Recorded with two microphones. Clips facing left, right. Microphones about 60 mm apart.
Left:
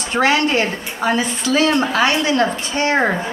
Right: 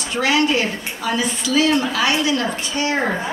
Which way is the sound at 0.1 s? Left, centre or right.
Left.